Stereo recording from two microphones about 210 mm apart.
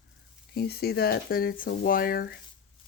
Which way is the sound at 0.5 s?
50° left (ahead or behind).